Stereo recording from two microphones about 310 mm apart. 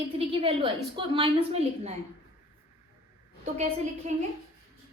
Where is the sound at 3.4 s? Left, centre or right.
Right.